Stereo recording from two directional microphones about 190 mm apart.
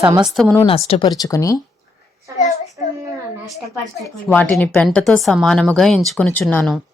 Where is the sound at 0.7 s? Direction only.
30° left (ahead or behind).